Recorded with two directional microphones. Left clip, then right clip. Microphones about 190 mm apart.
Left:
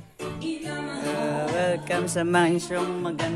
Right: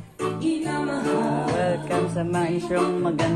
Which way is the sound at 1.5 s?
65° left (ahead or behind).